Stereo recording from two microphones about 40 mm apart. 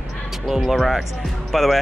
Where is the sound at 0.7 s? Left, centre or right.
Centre.